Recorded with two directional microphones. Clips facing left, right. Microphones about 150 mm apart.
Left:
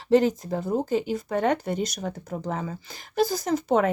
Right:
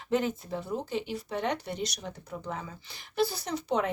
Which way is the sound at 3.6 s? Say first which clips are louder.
Left 6 dB; 50° left (ahead or behind).